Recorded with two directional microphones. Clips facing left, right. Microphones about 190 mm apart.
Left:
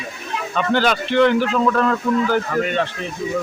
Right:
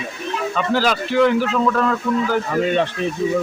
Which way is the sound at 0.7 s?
5° right (ahead or behind).